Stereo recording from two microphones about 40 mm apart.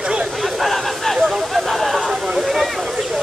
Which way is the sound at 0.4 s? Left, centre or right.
Centre.